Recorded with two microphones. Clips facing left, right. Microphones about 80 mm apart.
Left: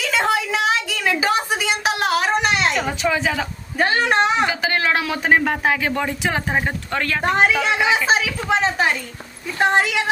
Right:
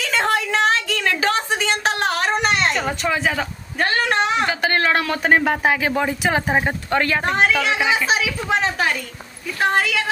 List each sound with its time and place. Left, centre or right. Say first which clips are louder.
0.0 s a sound: even; centre
4.2 s speech: left 1 dB; centre
8.6 s a woman's voice: left 2 dB; centre